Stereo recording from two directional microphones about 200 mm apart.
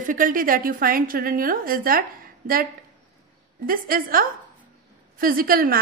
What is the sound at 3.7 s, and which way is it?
A woman's voice, 45° right (ahead or behind).